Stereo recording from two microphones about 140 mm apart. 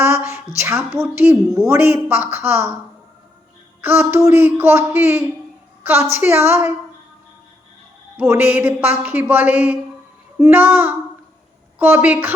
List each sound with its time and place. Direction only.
0.0 s a woman's voice: 15° right (ahead or behind)
3.8 s a sound: 15° right (ahead or behind)
4.3 s a woman's voice: 15° right (ahead or behind)
8.1 s a woman's voice: 15° right (ahead or behind)